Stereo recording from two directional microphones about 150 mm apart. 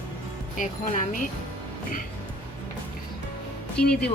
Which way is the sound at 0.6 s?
60° left (ahead or behind).